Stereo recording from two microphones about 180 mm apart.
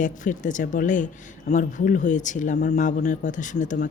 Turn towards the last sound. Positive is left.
turn(degrees=45)  # may be behind; listen again after turning